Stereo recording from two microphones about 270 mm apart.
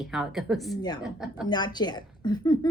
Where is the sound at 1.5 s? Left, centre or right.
Centre.